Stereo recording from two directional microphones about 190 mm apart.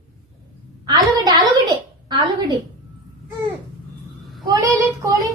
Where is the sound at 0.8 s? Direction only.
20° right (ahead or behind).